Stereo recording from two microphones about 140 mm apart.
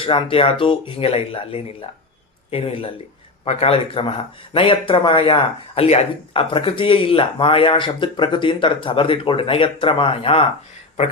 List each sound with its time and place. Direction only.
0.0 s speech: 40° left (ahead or behind)